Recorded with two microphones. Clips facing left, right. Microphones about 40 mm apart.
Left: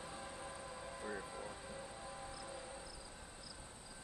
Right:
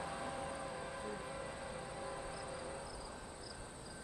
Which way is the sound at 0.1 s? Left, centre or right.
Right.